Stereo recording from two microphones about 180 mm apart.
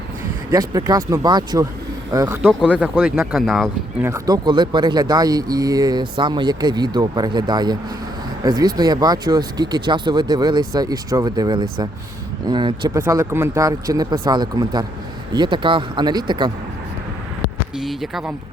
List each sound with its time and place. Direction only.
0.5 s speech: 20° right (ahead or behind)
2.5 s speech: 5° right (ahead or behind)
3.4 s speech: centre (ahead or behind)
4.0 s speech: 20° right (ahead or behind)
13.0 s speech: 15° right (ahead or behind)
17.7 s speech: centre (ahead or behind)